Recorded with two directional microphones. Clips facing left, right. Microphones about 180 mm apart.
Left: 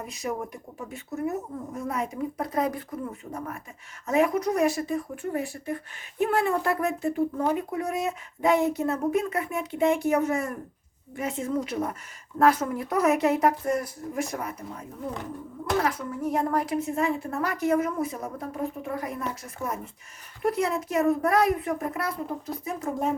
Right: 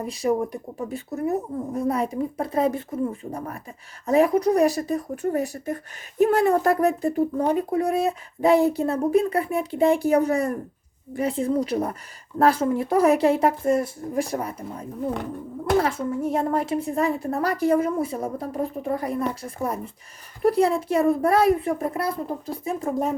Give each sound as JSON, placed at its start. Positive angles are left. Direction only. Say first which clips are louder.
{"t": 0.0, "sound": "speech", "louder": "right 8 dB", "side_deg": -35}